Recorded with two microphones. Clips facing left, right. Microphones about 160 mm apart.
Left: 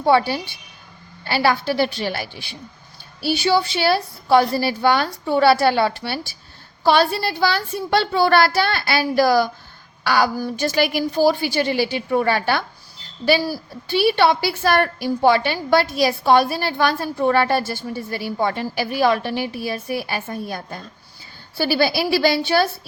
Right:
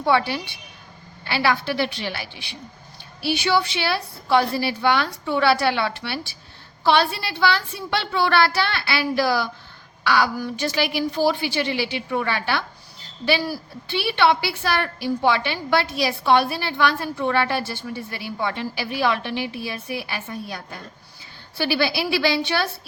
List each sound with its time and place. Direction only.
0.0 s a woman's voice: 35° left (ahead or behind)